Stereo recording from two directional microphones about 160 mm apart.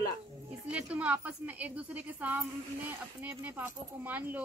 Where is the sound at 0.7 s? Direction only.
5° right (ahead or behind).